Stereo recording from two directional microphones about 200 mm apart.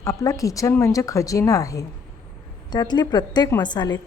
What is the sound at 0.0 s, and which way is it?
A woman's voice, 15° left (ahead or behind).